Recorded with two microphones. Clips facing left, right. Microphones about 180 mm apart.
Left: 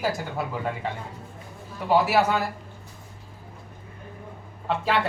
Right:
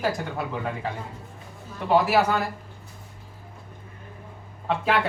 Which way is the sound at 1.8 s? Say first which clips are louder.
Even; 5° left (ahead or behind).